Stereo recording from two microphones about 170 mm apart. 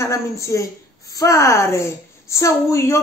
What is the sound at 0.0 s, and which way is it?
A woman's voice, 15° left (ahead or behind).